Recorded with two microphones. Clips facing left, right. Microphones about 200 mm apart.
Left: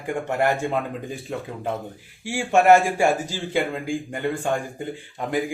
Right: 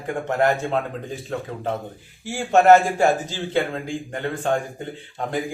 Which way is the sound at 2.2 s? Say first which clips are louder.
Right 2 dB; 10° left (ahead or behind).